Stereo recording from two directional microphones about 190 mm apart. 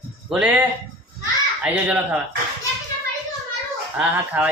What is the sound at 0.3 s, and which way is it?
Speech, 5° right (ahead or behind).